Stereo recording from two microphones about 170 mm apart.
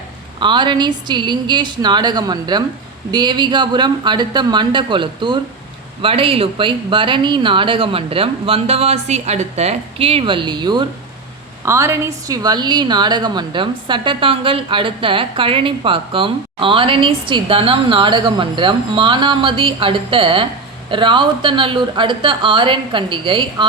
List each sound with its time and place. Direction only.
0.3 s a woman's voice: 25° right (ahead or behind)